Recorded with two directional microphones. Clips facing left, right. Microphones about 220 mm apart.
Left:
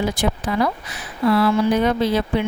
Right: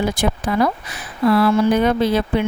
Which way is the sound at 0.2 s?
55° right (ahead or behind).